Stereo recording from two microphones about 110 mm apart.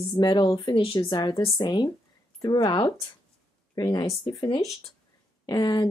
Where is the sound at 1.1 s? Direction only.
40° left (ahead or behind).